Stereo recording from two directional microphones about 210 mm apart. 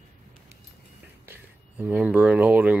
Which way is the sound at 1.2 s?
10° right (ahead or behind).